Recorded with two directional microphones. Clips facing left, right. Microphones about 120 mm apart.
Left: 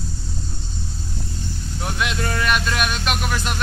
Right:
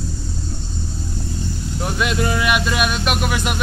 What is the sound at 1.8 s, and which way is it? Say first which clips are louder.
Vehicle: right 4 dB; centre (ahead or behind).